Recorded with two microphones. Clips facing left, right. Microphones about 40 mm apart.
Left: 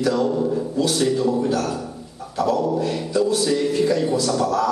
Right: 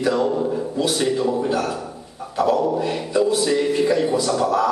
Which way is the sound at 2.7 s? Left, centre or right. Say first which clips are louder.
Right 1 dB; centre.